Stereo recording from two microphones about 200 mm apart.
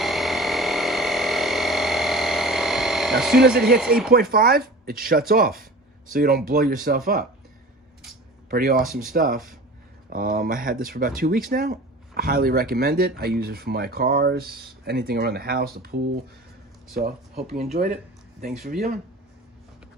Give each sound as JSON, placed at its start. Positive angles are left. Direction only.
{"t": 0.0, "sound": "a sound", "side_deg": 0}
{"t": 4.1, "sound": "speech", "side_deg": -45}
{"t": 8.4, "sound": "speech", "side_deg": -45}
{"t": 17.4, "sound": "speech", "side_deg": -30}
{"t": 18.5, "sound": "speech", "side_deg": 0}